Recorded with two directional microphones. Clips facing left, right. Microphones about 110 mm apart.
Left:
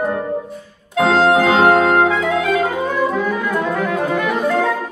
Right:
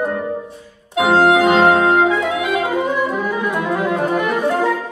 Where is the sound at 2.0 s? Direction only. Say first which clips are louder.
Left 1 dB; 15° right (ahead or behind).